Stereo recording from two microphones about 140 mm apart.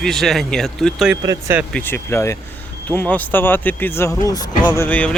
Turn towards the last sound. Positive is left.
turn(degrees=10)  # may be behind; listen again after turning